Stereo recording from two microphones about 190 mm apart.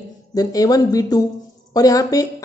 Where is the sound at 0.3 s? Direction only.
20° left (ahead or behind).